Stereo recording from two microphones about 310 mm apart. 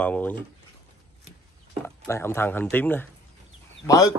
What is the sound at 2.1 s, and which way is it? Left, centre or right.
Speech, centre.